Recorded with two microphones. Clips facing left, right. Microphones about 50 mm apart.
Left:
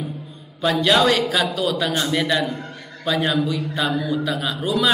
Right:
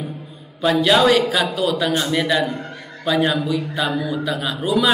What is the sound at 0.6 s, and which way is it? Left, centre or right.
A man's voice, centre.